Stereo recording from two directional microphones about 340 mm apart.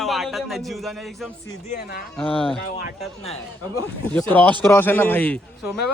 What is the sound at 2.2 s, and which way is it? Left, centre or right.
Speech, centre.